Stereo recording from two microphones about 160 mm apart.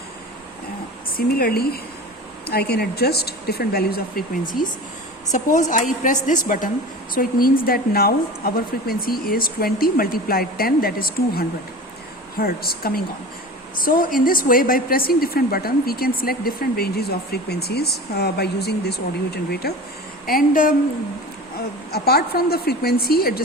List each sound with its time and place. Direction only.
1.1 s speech: 70° left (ahead or behind)
5.3 s a woman's voice: 50° left (ahead or behind)
7.1 s a woman's voice: 65° left (ahead or behind); by 19.7 s 80° left
20.2 s a woman's voice: 60° left (ahead or behind)
21.9 s speech: 80° left